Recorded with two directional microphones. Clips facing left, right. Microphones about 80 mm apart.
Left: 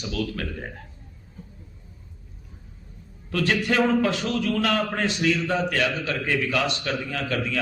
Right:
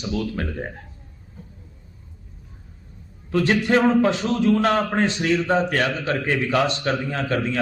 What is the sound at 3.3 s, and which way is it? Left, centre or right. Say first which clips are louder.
A man's voice: right 5 dB; right.